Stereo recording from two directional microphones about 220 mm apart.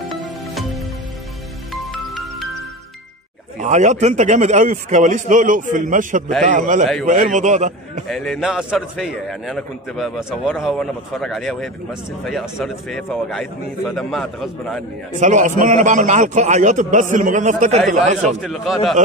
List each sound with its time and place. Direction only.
3.5 s a man's voice: 35° right (ahead or behind)
8.1 s a man's voice: centre (ahead or behind)
15.1 s a man's voice: 35° right (ahead or behind)
18.4 s a man's voice: centre (ahead or behind)